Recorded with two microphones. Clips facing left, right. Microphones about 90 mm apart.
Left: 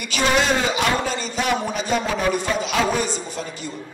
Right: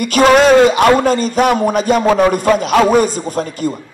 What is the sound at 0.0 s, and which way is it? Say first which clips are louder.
A man's voice: right 11 dB; 50° right (ahead or behind).